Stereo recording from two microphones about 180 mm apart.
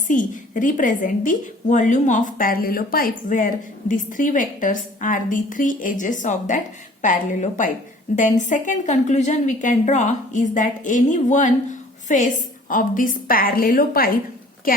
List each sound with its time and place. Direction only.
0.1 s a woman's voice: 45° left (ahead or behind)